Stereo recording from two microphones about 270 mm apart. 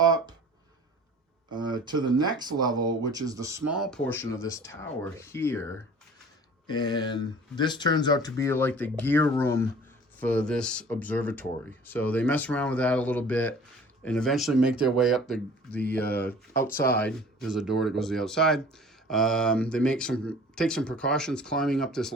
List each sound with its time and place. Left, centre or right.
0.0 s a sound: centre
1.5 s speech: centre
3.7 s speech: centre
6.7 s speech: centre
16.7 s speech: left
17.0 s speech: centre